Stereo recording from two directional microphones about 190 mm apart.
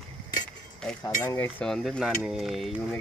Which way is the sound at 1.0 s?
15° left (ahead or behind).